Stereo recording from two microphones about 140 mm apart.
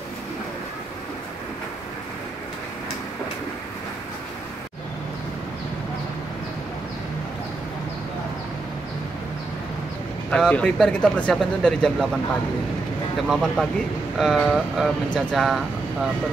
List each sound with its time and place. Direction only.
10.3 s speech: 5° left (ahead or behind)
13.3 s speech: centre (ahead or behind)